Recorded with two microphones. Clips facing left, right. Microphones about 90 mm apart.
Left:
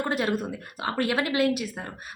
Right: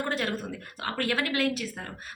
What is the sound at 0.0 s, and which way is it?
A woman's voice, 15° left (ahead or behind).